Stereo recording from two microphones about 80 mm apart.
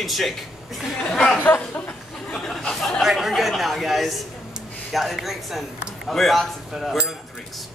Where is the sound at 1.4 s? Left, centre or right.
Left.